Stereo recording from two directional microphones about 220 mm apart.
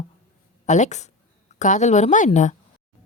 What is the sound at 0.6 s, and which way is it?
A woman's voice, 35° left (ahead or behind).